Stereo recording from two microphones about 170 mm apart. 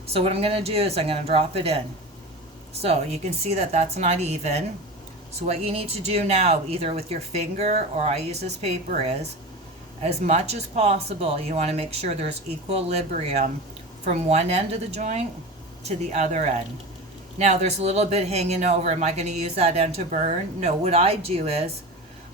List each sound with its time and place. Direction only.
0.1 s speech: 35° right (ahead or behind)
2.8 s speech: 40° right (ahead or behind)